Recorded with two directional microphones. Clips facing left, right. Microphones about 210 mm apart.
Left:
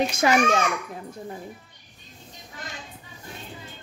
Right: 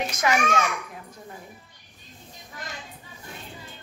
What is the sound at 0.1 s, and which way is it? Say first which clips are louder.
Speech: left 3 dB; 30° left (ahead or behind).